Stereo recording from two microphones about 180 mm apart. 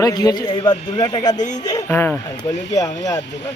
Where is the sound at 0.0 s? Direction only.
20° left (ahead or behind).